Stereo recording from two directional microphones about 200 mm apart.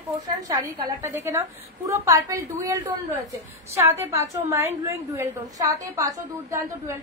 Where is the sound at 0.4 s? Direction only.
15° right (ahead or behind).